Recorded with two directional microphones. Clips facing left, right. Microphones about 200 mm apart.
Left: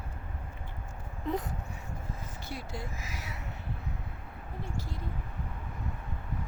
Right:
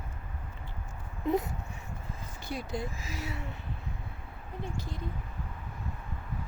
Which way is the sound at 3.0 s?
30° right (ahead or behind).